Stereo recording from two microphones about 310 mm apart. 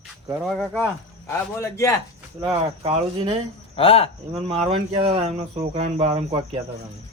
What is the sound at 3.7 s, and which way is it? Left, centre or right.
Speech, centre.